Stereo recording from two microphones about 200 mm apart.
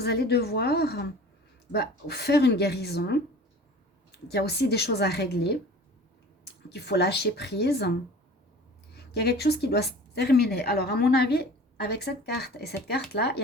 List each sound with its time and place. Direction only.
0.0 s a woman's voice: 55° left (ahead or behind)
4.3 s a woman's voice: 55° left (ahead or behind)
9.1 s a woman's voice: 55° left (ahead or behind)